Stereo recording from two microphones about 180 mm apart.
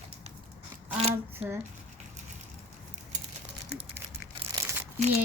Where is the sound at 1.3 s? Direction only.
10° right (ahead or behind).